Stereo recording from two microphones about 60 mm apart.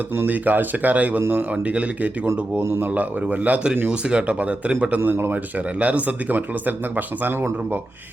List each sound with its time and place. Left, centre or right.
0.3 s speech: right
2.6 s speech: right
2.8 s speech: right
4.9 s a man's voice: right
5.8 s speech: right